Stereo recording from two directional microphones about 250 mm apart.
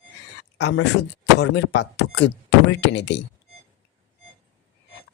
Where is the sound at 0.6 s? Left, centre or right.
Left.